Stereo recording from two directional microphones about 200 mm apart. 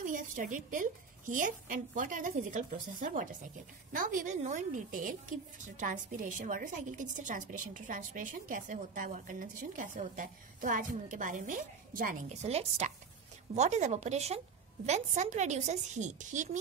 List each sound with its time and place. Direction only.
0.0 s a woman's voice: 40° right (ahead or behind)